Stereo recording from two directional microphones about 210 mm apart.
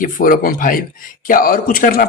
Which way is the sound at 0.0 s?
40° left (ahead or behind).